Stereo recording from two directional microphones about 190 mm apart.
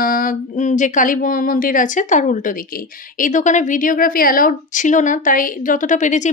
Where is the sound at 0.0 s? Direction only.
45° left (ahead or behind).